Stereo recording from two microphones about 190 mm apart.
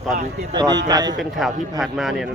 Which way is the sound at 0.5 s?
20° right (ahead or behind).